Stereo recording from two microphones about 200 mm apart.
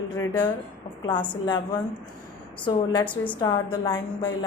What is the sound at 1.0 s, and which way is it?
Speech, 20° left (ahead or behind).